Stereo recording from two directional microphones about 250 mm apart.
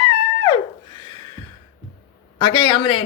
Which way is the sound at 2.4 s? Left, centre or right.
Centre.